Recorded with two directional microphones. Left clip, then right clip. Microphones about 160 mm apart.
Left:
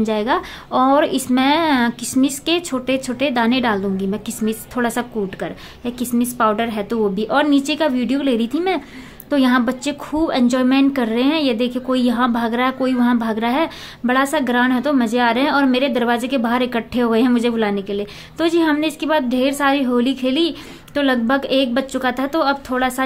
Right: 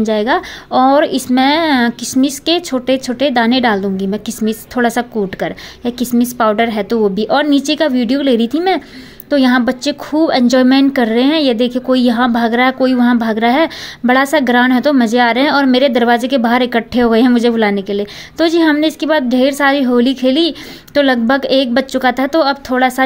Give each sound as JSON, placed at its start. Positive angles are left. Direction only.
{"t": 0.0, "sound": "a woman's voice", "side_deg": -20}